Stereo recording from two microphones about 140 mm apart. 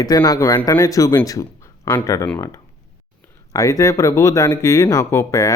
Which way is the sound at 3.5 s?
25° left (ahead or behind).